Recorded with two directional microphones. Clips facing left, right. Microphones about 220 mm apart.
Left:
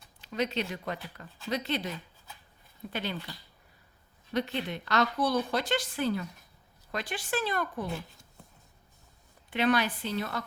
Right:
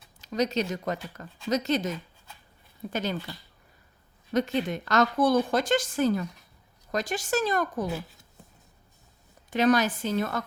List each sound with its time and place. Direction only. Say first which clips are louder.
0.2 s a woman's voice: right 5 dB; 40° right (ahead or behind)
4.3 s a woman's voice: right 5 dB; 45° right (ahead or behind)
9.5 s a woman's voice: right 4 dB; 40° right (ahead or behind)